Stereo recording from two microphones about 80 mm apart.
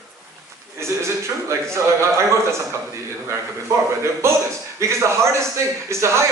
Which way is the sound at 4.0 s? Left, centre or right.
Right.